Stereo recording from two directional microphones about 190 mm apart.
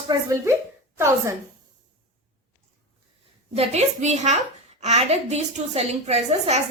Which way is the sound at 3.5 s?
35° right (ahead or behind).